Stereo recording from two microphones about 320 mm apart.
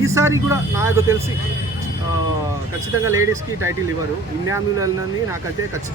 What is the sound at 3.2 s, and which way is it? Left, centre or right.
Speech, centre.